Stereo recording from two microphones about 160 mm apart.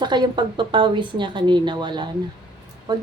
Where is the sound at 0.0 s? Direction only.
25° right (ahead or behind).